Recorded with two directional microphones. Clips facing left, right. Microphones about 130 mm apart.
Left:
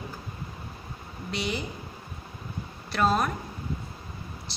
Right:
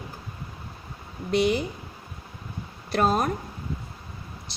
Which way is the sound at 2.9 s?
45° right (ahead or behind).